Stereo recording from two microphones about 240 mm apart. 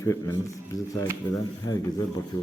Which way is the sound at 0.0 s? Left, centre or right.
Centre.